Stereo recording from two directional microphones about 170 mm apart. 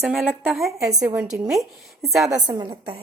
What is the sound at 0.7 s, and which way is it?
Speech, 20° right (ahead or behind).